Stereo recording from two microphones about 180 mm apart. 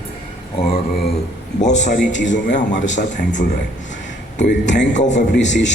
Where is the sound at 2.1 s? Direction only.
90° left.